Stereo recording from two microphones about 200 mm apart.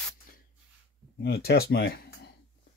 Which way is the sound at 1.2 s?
55° left (ahead or behind).